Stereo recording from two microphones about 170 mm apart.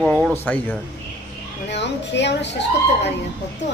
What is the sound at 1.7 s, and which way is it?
A woman's voice, 90° left.